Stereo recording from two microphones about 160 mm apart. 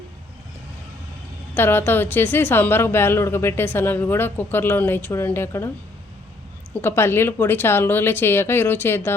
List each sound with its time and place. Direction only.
1.5 s a woman's voice: 15° left (ahead or behind)
6.8 s a woman's voice: 15° left (ahead or behind)